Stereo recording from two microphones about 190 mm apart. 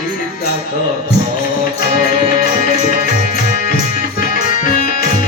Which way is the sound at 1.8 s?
50° left (ahead or behind).